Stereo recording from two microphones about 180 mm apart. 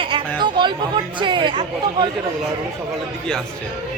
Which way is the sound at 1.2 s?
25° right (ahead or behind).